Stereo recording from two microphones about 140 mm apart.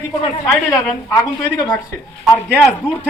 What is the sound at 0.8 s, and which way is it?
Speech, 25° left (ahead or behind).